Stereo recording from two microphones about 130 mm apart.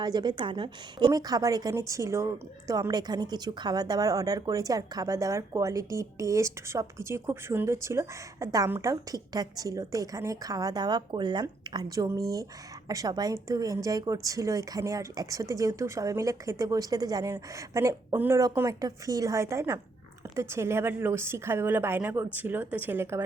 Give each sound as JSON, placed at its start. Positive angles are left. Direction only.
{"t": 0.0, "sound": "a woman's voice", "side_deg": -35}